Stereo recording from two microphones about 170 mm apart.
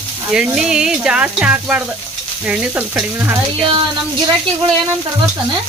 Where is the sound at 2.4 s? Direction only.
10° right (ahead or behind).